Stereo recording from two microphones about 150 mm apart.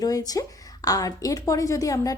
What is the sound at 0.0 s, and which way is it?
Speech, 25° left (ahead or behind).